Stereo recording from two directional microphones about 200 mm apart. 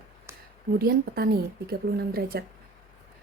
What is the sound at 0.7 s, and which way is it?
A woman's voice, 50° right (ahead or behind).